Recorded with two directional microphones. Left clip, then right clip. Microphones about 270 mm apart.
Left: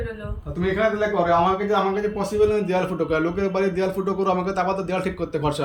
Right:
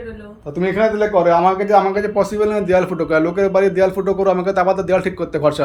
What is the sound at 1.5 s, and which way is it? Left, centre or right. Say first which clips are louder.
Speech: right 7 dB; centre.